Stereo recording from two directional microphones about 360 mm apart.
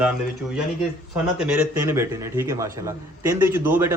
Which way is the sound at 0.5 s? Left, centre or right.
Centre.